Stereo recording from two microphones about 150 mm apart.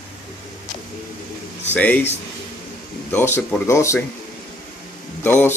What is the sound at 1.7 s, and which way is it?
Speech, 10° left (ahead or behind).